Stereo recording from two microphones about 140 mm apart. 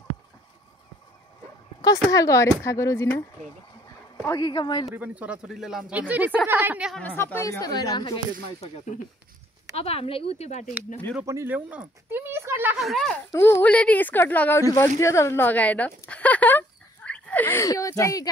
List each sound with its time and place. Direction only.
2.1 s speech: 20° left (ahead or behind)
4.9 s speech: 10° right (ahead or behind)
7.0 s speech: 10° left (ahead or behind); by 8.2 s 30° left (ahead or behind)
8.5 s speech: 60° left (ahead or behind)
9.8 s speech: 45° left (ahead or behind)
11.2 s speech: 15° right (ahead or behind)
12.7 s speech: centre (ahead or behind)
13.3 s a woman's voice: 15° left (ahead or behind)
14.6 s speech: 25° left (ahead or behind)
15.0 s a sound: 20° left (ahead or behind)